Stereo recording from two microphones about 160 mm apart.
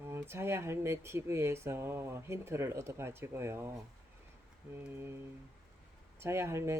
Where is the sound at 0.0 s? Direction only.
15° right (ahead or behind).